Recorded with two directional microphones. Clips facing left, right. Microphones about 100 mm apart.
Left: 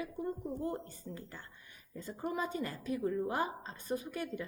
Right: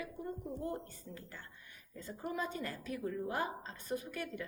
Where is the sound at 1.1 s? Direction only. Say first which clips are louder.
Left 3 dB; 20° left (ahead or behind).